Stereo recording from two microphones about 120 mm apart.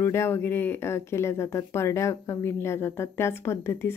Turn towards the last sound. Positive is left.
turn(degrees=20)  # may be behind; listen again after turning